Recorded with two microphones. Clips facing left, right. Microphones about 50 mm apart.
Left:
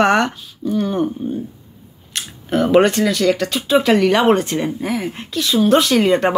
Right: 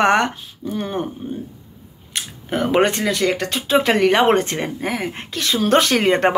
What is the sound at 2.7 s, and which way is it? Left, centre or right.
Speech, right.